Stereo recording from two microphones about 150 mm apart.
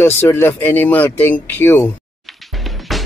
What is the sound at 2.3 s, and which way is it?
Music, centre (ahead or behind).